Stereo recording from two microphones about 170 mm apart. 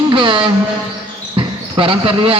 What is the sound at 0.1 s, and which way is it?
Speech, 30° right (ahead or behind).